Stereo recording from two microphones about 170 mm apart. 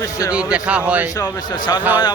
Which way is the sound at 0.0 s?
20° left (ahead or behind).